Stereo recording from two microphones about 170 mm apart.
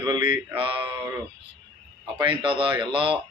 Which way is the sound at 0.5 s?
30° right (ahead or behind).